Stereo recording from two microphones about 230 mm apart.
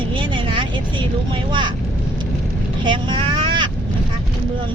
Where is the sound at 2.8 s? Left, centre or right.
Right.